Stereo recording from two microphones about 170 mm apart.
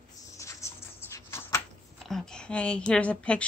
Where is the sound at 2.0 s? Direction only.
5° left (ahead or behind).